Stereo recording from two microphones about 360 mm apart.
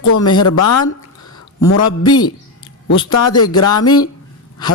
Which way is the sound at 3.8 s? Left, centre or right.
Centre.